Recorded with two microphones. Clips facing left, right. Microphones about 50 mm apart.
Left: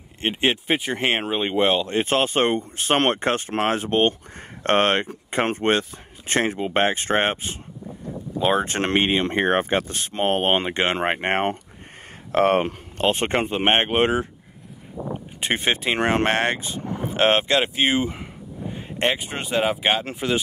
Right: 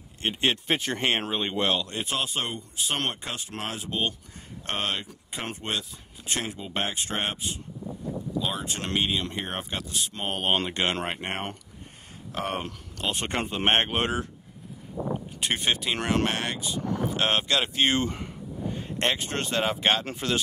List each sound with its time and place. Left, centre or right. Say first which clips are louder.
0.2 s speech: left 4 dB; left
15.4 s speech: left 5 dB; left
17.7 s speech: left 3 dB; centre